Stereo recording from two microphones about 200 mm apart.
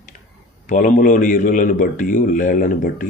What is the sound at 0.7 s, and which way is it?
A man's voice, 40° left (ahead or behind).